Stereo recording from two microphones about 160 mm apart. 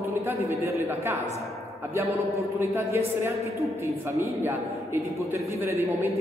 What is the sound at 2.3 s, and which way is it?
A woman's voice, 15° right (ahead or behind).